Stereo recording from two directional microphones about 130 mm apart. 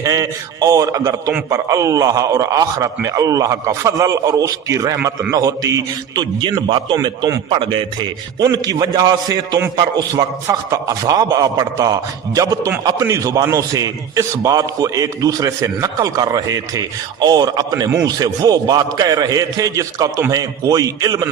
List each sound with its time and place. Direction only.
0.0 s a man's voice: 30° right (ahead or behind)
8.4 s a man's voice: 30° right (ahead or behind)